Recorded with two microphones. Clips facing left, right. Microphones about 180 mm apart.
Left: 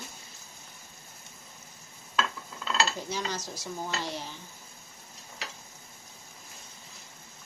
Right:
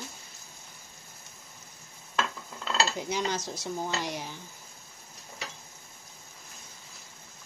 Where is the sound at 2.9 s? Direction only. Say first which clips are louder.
Right 3 dB; 20° right (ahead or behind).